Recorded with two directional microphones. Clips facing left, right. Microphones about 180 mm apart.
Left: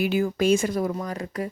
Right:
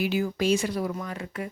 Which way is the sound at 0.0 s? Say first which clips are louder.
Left 3 dB; 50° left (ahead or behind).